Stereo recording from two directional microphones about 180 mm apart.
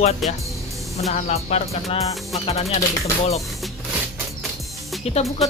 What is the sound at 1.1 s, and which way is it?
Speech, 40° left (ahead or behind).